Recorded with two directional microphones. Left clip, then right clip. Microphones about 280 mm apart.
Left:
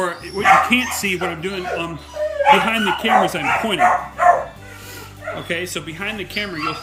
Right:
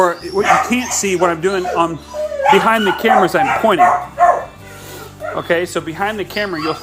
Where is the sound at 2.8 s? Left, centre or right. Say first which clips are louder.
Right 4 dB; right.